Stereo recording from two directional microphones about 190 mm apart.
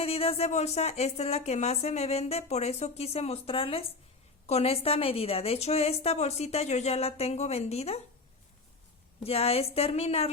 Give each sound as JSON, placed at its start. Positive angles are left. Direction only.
{"t": 0.0, "sound": "a woman's voice", "side_deg": 30}
{"t": 9.2, "sound": "a woman's voice", "side_deg": 30}